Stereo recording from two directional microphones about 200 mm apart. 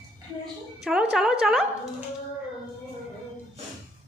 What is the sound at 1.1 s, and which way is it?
Speech, 5° right (ahead or behind).